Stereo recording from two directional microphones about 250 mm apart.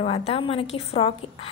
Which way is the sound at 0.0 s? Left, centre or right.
Left.